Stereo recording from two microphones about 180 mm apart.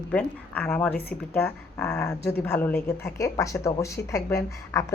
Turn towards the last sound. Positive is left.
turn(degrees=15)  # may be behind; listen again after turning